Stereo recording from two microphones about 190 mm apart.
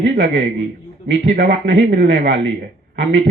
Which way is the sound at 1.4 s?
65° right (ahead or behind).